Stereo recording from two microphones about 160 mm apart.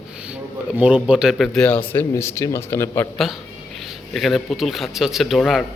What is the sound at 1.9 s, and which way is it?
A man's voice, 15° left (ahead or behind).